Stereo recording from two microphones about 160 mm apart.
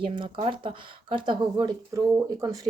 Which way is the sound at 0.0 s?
35° right (ahead or behind).